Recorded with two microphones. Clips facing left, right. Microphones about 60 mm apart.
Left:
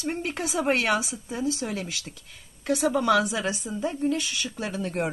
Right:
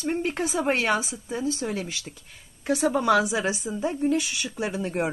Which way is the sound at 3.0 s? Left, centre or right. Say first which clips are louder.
Right 2 dB; centre.